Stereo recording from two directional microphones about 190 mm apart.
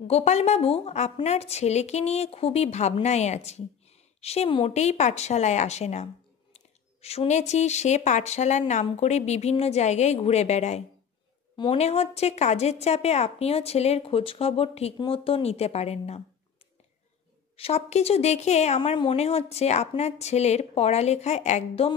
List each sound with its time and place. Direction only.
0.1 s a woman's voice: 35° left (ahead or behind)
17.6 s a woman's voice: 35° left (ahead or behind)